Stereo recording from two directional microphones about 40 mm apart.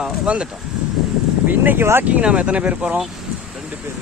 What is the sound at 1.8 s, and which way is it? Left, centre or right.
Speech, right.